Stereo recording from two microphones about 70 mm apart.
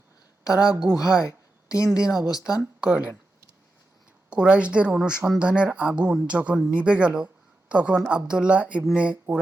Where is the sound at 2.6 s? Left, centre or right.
Right.